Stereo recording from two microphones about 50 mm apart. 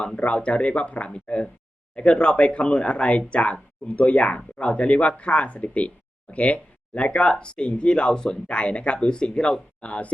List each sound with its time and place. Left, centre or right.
0.2 s speech: left